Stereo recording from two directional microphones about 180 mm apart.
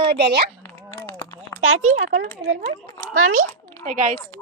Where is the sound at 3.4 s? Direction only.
45° right (ahead or behind).